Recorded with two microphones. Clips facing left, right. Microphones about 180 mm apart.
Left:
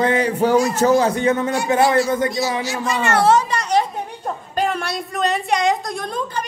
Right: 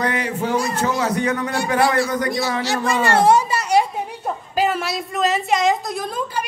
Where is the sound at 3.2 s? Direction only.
10° right (ahead or behind).